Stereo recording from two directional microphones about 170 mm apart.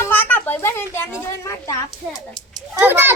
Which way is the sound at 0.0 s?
10° left (ahead or behind).